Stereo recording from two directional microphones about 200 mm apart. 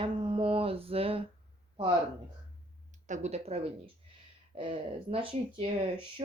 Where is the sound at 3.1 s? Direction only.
35° right (ahead or behind).